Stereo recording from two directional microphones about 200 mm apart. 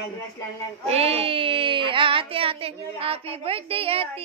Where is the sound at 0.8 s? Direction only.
30° right (ahead or behind).